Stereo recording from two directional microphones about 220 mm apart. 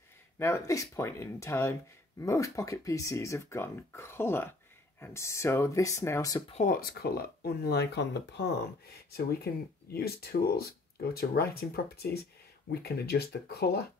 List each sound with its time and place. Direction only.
0.4 s speech: 15° left (ahead or behind)
6.5 s speech: 35° left (ahead or behind)